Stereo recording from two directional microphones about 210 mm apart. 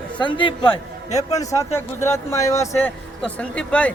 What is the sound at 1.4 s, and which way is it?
A man's voice, 15° left (ahead or behind).